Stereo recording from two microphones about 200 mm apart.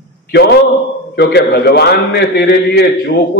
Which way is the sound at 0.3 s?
55° left (ahead or behind).